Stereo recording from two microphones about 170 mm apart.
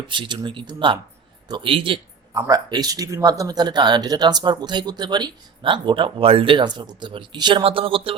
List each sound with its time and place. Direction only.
0.1 s speech: 25° right (ahead or behind)